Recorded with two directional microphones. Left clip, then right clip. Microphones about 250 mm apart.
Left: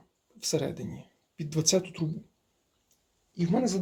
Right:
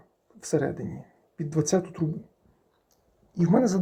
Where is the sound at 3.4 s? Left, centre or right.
Centre.